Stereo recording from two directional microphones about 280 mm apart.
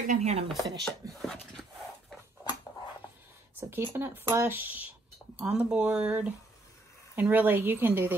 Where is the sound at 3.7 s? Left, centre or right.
Centre.